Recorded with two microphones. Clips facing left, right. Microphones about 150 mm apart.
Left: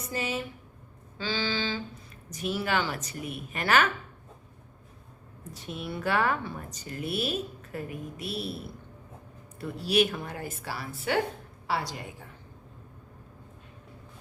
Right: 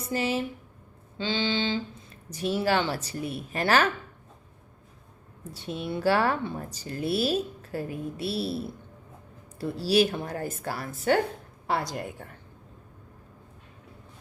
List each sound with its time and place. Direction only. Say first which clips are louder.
0.1 s saxophone: right 5 dB; 30° right (ahead or behind)
2.3 s a woman's voice: right 4 dB; 30° right (ahead or behind)
5.5 s a woman's voice: right 4 dB; 30° right (ahead or behind); by 12.0 s 50° right (ahead or behind)